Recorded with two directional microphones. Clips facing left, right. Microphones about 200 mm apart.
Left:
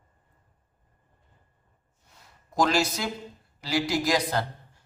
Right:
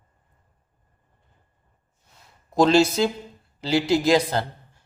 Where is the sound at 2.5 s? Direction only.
25° right (ahead or behind).